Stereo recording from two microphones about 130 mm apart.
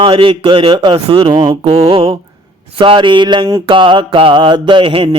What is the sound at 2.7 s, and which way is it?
A man's voice, 45° right (ahead or behind).